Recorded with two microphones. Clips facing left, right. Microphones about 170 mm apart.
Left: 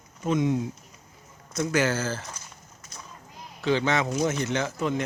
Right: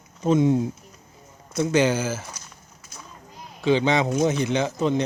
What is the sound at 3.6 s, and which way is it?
Speech, 20° right (ahead or behind).